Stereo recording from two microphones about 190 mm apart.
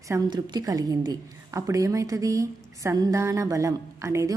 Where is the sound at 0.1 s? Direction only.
20° right (ahead or behind).